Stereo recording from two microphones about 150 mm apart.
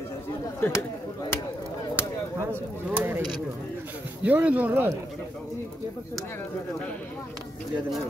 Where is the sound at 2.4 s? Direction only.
15° right (ahead or behind).